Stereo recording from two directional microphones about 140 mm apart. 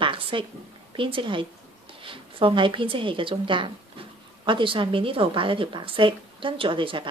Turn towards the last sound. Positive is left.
turn(degrees=-35)  # may be behind; listen again after turning